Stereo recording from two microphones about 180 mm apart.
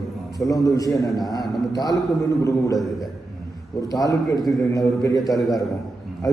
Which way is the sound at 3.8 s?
20° left (ahead or behind).